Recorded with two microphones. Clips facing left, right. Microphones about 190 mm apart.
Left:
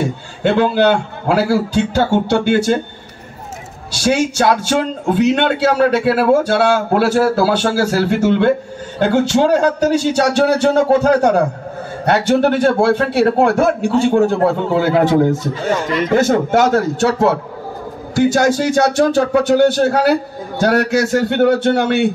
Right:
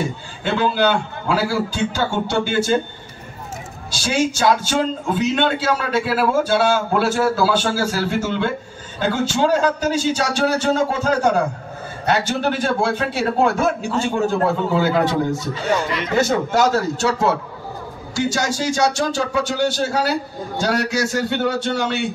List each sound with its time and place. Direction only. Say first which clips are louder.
0.0 s a man's voice: left 7 dB; 65° left (ahead or behind)
3.9 s a man's voice: left 5 dB; 65° left (ahead or behind)
16.0 s a man's voice: left 5 dB; 50° left (ahead or behind)